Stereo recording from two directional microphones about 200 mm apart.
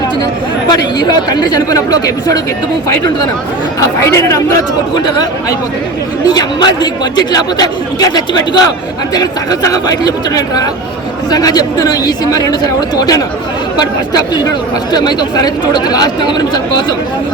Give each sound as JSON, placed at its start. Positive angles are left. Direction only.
{"t": 0.7, "sound": "a man's voice", "side_deg": 20}
{"t": 3.8, "sound": "a man's voice", "side_deg": 15}